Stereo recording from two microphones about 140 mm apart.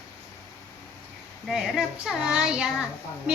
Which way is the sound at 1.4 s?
Centre (ahead or behind).